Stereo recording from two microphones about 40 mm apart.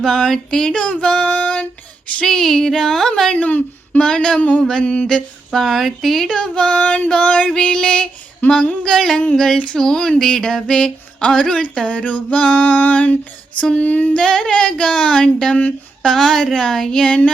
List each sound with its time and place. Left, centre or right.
0.0 s a sound: centre
1.0 s child singing: left
2.2 s a sound: centre
3.3 s speech: left; by 4.4 s centre
4.4 s female singing: left
4.8 s speech: left
5.5 s speech: centre
6.2 s speech: centre
8.8 s a sound: centre
11.3 s female singing: left
14.2 s speech: centre
16.0 s a sound: centre